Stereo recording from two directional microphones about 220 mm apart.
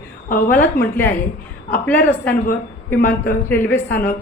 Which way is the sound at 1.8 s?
10° left (ahead or behind).